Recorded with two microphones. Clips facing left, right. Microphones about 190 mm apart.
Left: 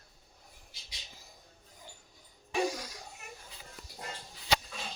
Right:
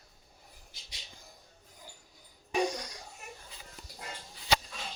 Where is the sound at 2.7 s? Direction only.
5° left (ahead or behind).